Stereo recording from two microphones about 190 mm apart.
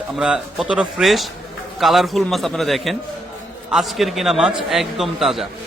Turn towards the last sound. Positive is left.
turn(degrees=0)  # may be behind; listen again after turning